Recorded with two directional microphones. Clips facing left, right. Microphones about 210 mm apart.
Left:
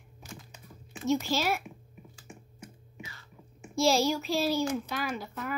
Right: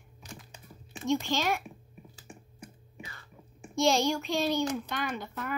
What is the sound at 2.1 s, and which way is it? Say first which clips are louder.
Computer keyboard: even; 35° right (ahead or behind).